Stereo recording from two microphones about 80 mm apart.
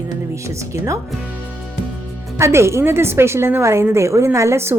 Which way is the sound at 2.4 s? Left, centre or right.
Right.